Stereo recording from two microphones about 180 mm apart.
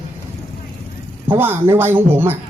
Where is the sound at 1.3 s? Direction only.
10° right (ahead or behind).